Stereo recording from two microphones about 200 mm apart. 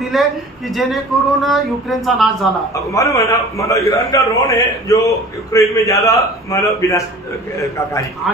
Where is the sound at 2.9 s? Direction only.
15° left (ahead or behind).